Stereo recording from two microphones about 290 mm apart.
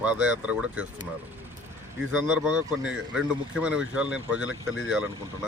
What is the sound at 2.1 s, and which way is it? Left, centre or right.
Speech, centre.